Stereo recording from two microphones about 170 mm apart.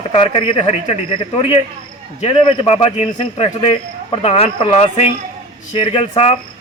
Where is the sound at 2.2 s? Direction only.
35° left (ahead or behind).